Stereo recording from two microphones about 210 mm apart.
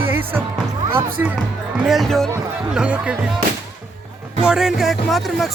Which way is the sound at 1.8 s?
Centre (ahead or behind).